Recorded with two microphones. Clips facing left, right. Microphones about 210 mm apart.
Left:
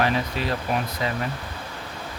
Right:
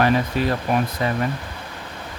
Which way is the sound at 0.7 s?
50° right (ahead or behind).